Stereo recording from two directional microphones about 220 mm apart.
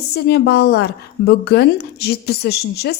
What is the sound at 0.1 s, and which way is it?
A woman's voice, 45° left (ahead or behind).